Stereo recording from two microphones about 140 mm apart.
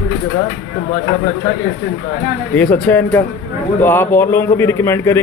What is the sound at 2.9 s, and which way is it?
A man's voice, 15° left (ahead or behind).